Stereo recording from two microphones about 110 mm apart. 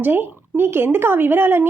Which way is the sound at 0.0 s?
20° right (ahead or behind).